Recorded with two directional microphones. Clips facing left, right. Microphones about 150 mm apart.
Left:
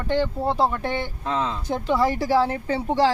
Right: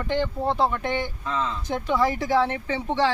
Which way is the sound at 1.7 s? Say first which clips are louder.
Left 2 dB; 5° left (ahead or behind).